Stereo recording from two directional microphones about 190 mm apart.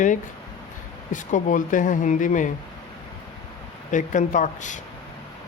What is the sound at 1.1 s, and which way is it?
Speech, 40° left (ahead or behind).